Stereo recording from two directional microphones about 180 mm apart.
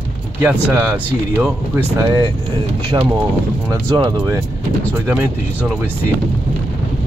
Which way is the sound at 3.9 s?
25° right (ahead or behind).